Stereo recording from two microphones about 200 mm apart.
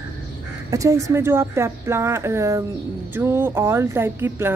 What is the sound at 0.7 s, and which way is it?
Speech, 15° right (ahead or behind).